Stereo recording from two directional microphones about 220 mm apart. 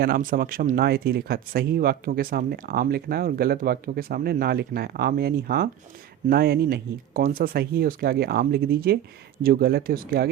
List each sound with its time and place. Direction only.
0.0 s speech: 40° right (ahead or behind)